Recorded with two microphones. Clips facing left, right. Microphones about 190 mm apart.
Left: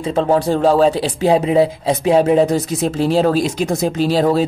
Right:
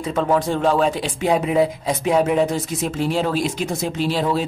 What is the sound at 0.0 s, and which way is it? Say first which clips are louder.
Speech: left 4 dB; 30° left (ahead or behind).